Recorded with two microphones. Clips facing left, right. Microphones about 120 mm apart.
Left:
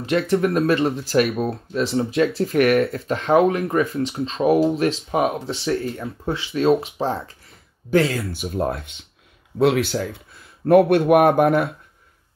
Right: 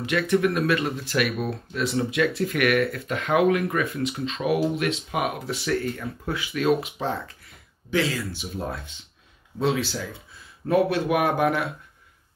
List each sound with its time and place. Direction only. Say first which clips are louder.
0.0 s speech: left 3 dB; 35° left (ahead or behind)
7.9 s speech: left 6 dB; 50° left (ahead or behind)